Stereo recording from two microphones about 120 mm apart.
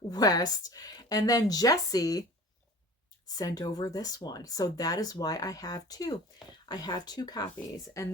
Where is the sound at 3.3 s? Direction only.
30° left (ahead or behind).